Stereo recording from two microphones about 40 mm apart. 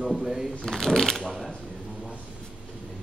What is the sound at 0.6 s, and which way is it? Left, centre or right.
Speech, centre.